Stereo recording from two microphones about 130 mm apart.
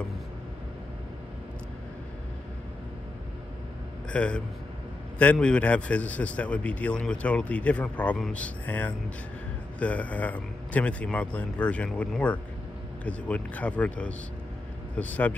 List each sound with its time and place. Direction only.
4.1 s a man's voice: 10° left (ahead or behind)